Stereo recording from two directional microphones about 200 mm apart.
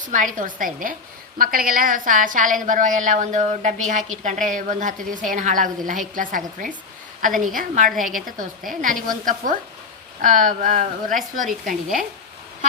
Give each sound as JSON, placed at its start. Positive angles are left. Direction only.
{"t": 0.1, "sound": "a woman's voice", "side_deg": -40}